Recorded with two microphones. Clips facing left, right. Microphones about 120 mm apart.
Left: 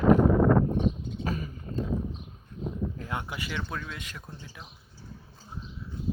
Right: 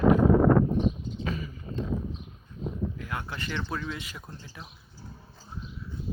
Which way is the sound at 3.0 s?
20° left (ahead or behind).